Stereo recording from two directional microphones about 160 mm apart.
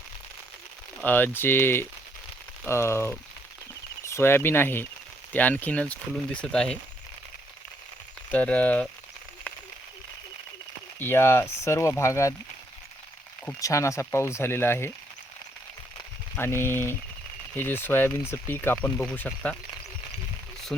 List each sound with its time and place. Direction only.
1.0 s speech: 10° left (ahead or behind)
8.3 s speech: 10° left (ahead or behind)
11.0 s speech: 15° left (ahead or behind)
13.6 s speech: 20° left (ahead or behind)
16.3 s speech: 15° left (ahead or behind)